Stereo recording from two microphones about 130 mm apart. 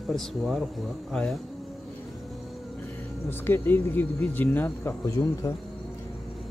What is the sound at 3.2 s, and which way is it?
Speech, 15° left (ahead or behind).